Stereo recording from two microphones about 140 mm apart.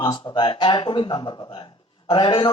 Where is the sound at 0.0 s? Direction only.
35° left (ahead or behind).